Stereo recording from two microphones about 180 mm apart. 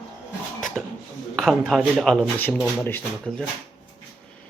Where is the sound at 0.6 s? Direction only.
Centre (ahead or behind).